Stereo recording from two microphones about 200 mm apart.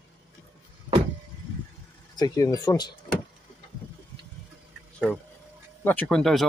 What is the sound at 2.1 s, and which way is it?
Speech, 20° left (ahead or behind).